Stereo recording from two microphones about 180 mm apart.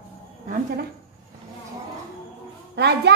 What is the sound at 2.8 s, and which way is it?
Speech, 65° right (ahead or behind).